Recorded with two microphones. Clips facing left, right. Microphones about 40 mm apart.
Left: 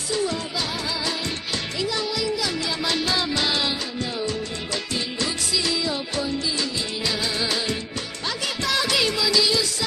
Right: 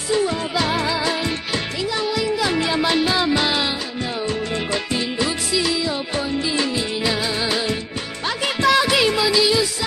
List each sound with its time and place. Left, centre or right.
0.7 s music: right
2.1 s music: right
2.8 s music: right
4.9 s music: centre
6.1 s music: right
7.0 s music: centre